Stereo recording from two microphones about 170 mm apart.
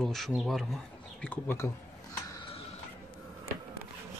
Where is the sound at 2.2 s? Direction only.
20° left (ahead or behind).